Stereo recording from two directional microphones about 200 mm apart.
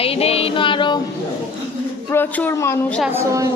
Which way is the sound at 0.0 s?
30° left (ahead or behind).